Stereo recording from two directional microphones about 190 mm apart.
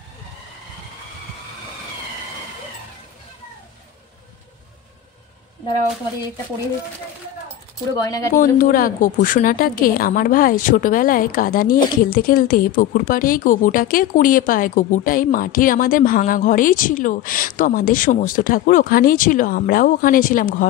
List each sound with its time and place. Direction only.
7.9 s speech: 20° left (ahead or behind)
8.4 s a woman's voice: 45° left (ahead or behind)